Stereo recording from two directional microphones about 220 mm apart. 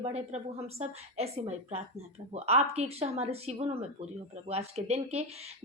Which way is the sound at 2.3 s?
30° right (ahead or behind).